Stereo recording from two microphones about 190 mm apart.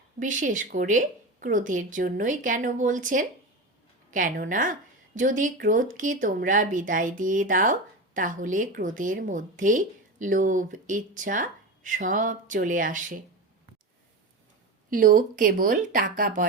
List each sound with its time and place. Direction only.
0.2 s speech: 40° right (ahead or behind)
14.8 s speech: 45° right (ahead or behind)